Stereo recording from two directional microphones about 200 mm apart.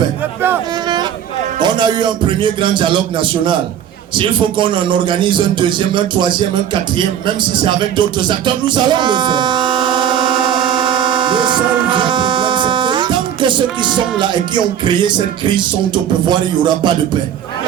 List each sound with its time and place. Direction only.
1.6 s a man's voice: 20° right (ahead or behind)
7.3 s music: 25° right (ahead or behind)
13.9 s a man's voice: 25° right (ahead or behind)